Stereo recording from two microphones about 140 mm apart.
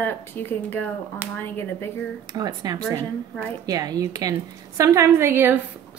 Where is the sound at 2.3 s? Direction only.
25° right (ahead or behind).